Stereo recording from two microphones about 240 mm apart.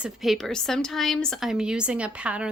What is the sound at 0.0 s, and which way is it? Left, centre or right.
Speech, centre.